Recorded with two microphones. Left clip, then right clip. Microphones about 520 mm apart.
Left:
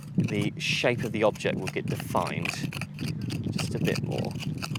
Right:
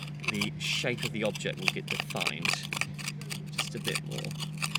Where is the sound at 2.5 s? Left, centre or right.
Right.